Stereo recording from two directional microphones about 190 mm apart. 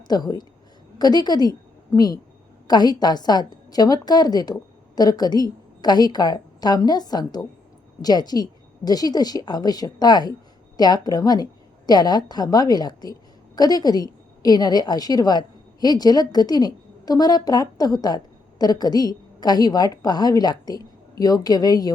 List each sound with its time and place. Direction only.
0.1 s a woman's voice: 20° left (ahead or behind)